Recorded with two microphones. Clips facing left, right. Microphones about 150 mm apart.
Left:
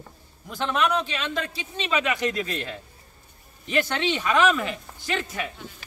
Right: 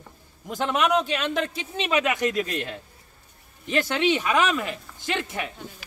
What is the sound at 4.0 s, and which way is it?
Speech, 10° right (ahead or behind).